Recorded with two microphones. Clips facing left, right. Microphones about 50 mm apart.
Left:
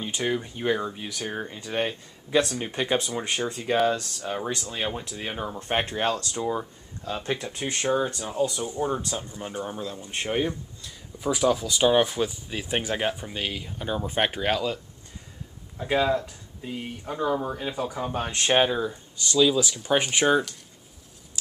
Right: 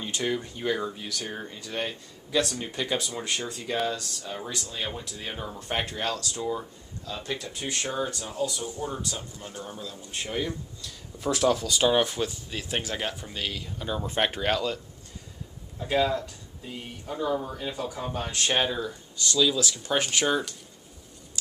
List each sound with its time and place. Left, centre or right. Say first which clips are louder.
0.0 s speech: left 2 dB; centre
5.6 s speech: left 4 dB; left
9.8 s speech: left 4 dB; left
11.1 s speech: left 1 dB; centre
15.8 s speech: left 2 dB; centre